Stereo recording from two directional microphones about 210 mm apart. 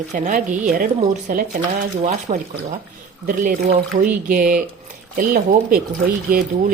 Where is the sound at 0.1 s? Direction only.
35° right (ahead or behind).